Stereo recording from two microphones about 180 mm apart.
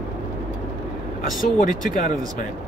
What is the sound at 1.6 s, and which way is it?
Speech, 45° left (ahead or behind).